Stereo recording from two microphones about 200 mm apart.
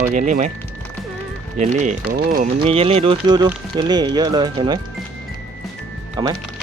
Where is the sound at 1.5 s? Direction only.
35° right (ahead or behind).